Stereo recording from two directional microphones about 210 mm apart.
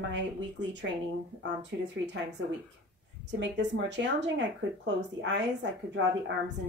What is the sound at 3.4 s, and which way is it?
Speech, 55° right (ahead or behind).